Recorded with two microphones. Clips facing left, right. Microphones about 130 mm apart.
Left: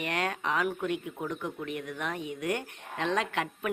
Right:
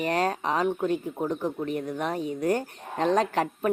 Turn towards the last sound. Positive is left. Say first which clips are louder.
# right 7 dB
turn(degrees=-40)  # may be behind; listen again after turning